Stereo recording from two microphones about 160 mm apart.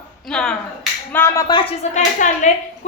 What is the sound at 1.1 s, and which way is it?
Speech, 15° left (ahead or behind).